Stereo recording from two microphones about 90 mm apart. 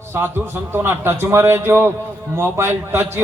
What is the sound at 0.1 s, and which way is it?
A man's voice, 25° right (ahead or behind).